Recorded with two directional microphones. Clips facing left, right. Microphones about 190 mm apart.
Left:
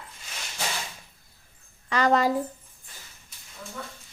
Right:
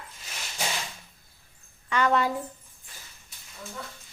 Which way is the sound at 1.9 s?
35° left (ahead or behind).